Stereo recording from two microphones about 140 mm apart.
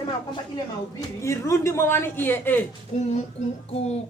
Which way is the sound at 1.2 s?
20° left (ahead or behind).